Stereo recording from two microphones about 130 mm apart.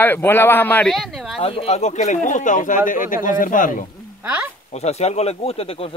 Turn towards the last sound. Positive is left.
turn(degrees=50)  # may be behind; listen again after turning